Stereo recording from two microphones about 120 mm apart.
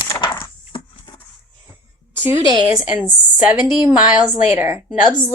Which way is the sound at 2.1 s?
25° right (ahead or behind).